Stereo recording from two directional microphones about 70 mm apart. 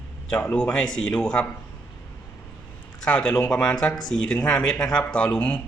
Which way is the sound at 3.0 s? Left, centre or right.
Centre.